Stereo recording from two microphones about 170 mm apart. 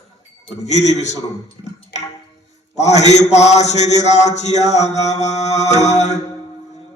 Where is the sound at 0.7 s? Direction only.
40° left (ahead or behind).